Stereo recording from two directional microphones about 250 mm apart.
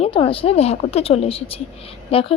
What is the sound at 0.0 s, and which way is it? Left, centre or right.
Speech, left.